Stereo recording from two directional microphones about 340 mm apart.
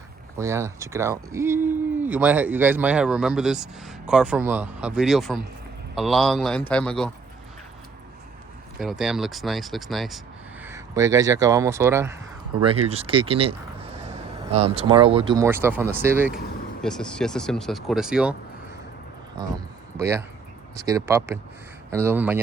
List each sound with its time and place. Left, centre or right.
0.3 s speech: centre
8.8 s speech: centre
20.0 s speech: centre